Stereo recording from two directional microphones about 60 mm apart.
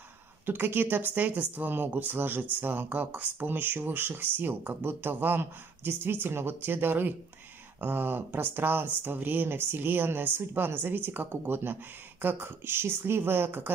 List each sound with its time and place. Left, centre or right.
0.5 s speech: right